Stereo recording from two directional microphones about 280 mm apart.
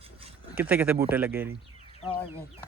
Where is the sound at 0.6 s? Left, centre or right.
Centre.